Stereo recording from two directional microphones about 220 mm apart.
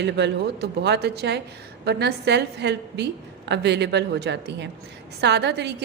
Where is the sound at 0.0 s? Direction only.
50° right (ahead or behind).